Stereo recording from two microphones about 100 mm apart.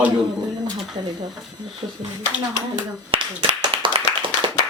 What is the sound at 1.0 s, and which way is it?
Speech, 55° right (ahead or behind).